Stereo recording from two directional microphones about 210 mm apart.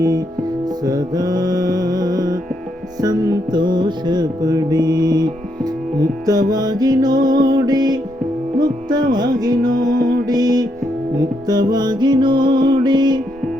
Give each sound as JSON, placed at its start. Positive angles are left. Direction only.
{"t": 0.0, "sound": "music", "side_deg": -20}
{"t": 9.1, "sound": "music", "side_deg": -15}
{"t": 9.7, "sound": "music", "side_deg": -40}
{"t": 10.2, "sound": "music", "side_deg": -15}